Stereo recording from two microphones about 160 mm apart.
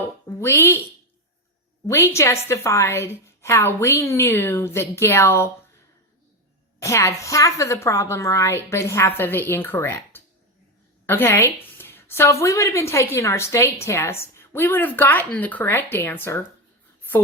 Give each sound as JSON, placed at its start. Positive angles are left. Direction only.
{"t": 0.3, "sound": "a woman's voice", "side_deg": 15}
{"t": 1.9, "sound": "a woman's voice", "side_deg": 15}
{"t": 6.8, "sound": "a woman's voice", "side_deg": 20}